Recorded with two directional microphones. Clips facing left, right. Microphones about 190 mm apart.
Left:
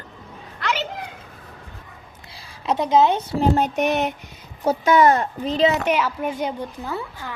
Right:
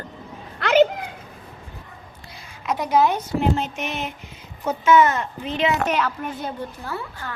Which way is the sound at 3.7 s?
65° left (ahead or behind).